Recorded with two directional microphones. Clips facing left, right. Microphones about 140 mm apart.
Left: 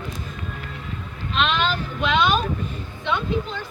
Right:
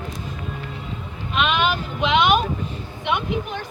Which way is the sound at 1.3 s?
10° right (ahead or behind).